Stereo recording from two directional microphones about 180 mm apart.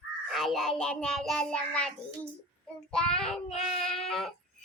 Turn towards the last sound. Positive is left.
turn(degrees=5)  # may be behind; listen again after turning